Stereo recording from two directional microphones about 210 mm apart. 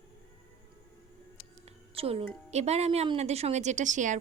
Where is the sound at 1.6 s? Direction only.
30° right (ahead or behind).